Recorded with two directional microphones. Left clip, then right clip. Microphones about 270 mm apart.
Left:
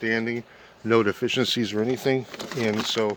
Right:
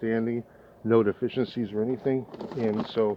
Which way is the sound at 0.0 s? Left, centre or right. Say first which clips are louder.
Left 3 dB; left.